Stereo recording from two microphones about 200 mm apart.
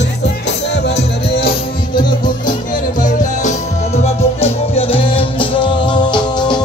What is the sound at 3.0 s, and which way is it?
Music, 40° left (ahead or behind).